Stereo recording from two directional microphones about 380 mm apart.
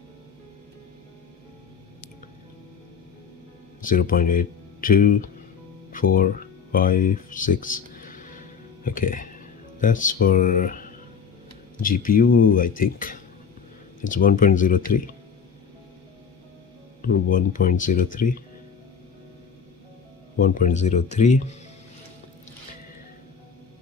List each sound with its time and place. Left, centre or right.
3.8 s speech: left
5.9 s guitar: left
11.8 s speech: left
17.0 s speech: left
20.3 s speech: left